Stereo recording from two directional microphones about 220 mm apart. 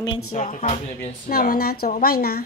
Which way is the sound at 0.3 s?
30° left (ahead or behind).